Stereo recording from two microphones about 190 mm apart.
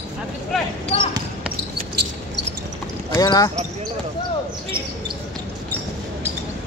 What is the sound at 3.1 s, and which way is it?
Speech, 20° left (ahead or behind).